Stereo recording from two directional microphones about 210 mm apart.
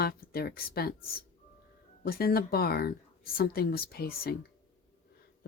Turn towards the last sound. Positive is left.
turn(degrees=45)  # may be behind; listen again after turning